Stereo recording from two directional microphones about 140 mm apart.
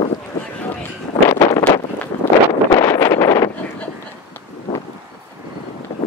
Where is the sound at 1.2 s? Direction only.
20° left (ahead or behind).